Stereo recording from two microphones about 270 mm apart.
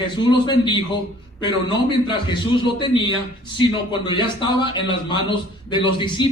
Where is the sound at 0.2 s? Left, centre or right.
Centre.